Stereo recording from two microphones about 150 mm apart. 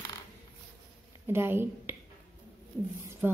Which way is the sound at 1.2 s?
15° right (ahead or behind).